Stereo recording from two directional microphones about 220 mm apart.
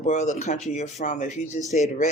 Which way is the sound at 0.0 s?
30° left (ahead or behind).